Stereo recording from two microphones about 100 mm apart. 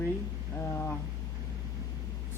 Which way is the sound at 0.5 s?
20° left (ahead or behind).